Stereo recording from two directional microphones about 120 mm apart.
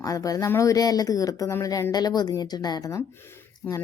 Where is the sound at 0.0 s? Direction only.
30° left (ahead or behind).